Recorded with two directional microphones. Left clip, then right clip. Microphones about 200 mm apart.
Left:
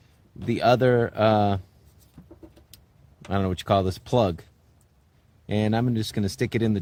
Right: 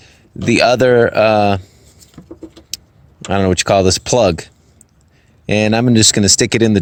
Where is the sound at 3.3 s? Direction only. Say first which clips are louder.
Right 11 dB; 20° right (ahead or behind).